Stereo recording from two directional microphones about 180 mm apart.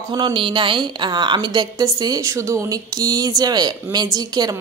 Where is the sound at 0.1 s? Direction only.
25° right (ahead or behind).